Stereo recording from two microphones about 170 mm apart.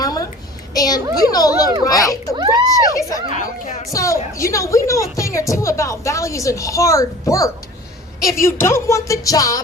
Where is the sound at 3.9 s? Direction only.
20° left (ahead or behind).